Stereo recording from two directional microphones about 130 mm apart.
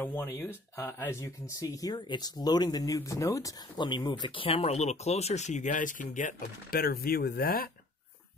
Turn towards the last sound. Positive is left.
turn(degrees=90)